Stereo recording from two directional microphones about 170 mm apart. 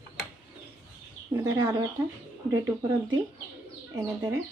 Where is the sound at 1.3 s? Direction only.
15° right (ahead or behind).